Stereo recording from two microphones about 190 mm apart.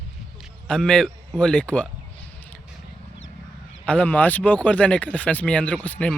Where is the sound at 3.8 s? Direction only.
5° left (ahead or behind).